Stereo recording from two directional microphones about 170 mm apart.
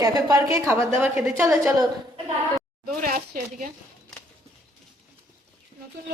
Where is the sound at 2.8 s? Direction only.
55° right (ahead or behind).